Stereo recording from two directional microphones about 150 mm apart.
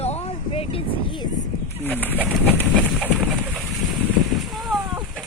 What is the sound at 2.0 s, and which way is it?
Speech, 10° left (ahead or behind).